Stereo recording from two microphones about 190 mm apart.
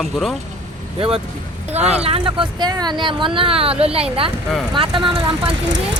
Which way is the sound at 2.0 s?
30° right (ahead or behind).